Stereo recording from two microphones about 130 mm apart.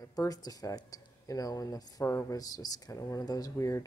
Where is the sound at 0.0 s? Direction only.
30° left (ahead or behind).